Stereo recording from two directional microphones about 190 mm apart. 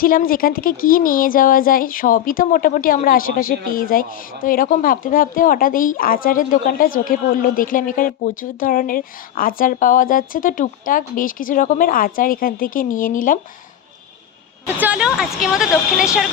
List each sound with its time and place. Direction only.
0.0 s speech: 50° left (ahead or behind)
14.8 s speech: 5° right (ahead or behind)